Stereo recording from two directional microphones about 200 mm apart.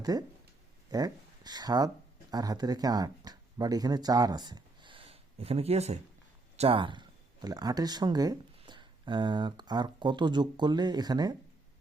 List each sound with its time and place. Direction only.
0.0 s speech: 20° right (ahead or behind)